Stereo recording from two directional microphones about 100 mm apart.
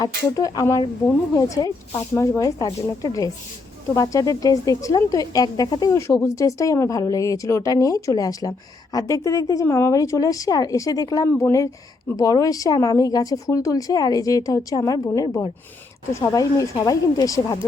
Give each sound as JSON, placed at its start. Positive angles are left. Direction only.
{"t": 0.0, "sound": "a woman's voice", "side_deg": 35}
{"t": 2.4, "sound": "a woman's voice", "side_deg": 40}